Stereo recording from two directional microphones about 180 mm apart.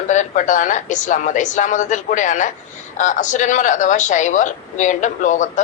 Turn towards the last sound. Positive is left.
turn(degrees=45)  # may be behind; listen again after turning